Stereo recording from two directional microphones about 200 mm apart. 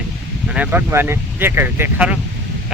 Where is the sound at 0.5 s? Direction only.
10° right (ahead or behind).